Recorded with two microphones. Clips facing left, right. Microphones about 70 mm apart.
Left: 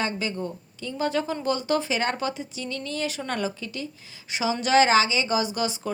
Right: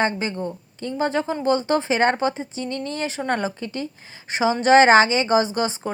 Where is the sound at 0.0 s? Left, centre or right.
Right.